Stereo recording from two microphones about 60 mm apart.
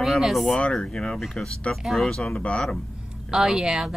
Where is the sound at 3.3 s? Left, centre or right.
Centre.